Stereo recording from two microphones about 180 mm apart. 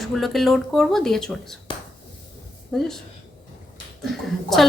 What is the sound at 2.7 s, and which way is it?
Speech, centre (ahead or behind).